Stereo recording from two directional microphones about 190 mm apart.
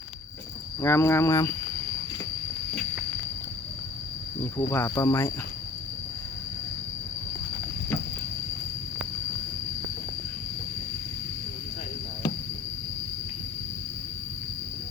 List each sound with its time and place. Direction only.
0.8 s speech: 15° left (ahead or behind)
4.5 s speech: 15° left (ahead or behind)